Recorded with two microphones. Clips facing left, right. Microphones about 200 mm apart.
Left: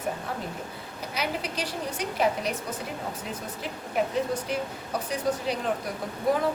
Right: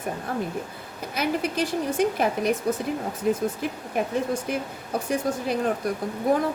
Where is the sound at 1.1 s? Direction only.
50° right (ahead or behind).